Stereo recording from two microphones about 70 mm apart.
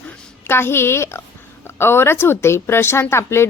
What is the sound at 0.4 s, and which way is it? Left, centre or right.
A woman's voice, left.